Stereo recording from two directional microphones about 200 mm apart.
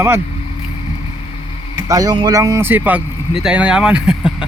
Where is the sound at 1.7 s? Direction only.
20° right (ahead or behind).